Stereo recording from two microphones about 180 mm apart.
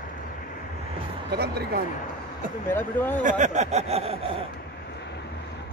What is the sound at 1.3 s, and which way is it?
Speech, 65° right (ahead or behind).